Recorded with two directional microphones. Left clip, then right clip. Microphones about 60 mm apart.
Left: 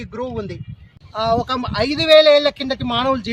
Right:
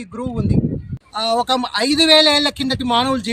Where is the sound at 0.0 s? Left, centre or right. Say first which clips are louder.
Left 1 dB; centre.